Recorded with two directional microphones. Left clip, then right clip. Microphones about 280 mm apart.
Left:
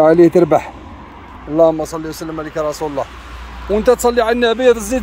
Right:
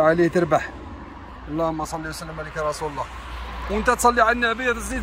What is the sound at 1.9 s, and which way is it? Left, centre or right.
Speech, centre.